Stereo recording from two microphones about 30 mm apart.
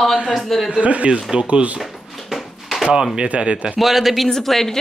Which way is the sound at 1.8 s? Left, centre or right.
Centre.